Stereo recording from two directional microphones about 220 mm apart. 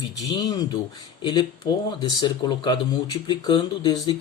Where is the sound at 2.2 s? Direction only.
20° left (ahead or behind).